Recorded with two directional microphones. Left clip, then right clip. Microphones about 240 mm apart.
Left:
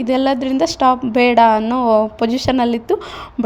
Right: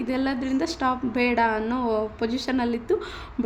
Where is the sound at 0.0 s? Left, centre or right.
Left.